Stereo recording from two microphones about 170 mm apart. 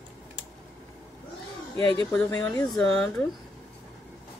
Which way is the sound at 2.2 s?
20° left (ahead or behind).